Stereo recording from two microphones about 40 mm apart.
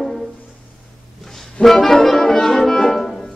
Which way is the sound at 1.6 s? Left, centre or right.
Centre.